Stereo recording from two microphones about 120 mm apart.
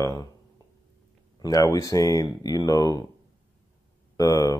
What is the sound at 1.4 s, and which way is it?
Speech, 30° left (ahead or behind).